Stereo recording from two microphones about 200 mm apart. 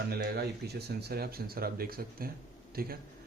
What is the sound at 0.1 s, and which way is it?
Speech, 55° right (ahead or behind).